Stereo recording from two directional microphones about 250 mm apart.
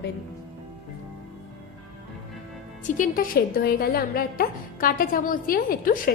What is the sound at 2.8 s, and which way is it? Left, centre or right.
A woman's voice, left.